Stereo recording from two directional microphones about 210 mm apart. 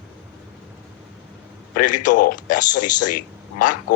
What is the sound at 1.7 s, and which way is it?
Speech, 40° left (ahead or behind).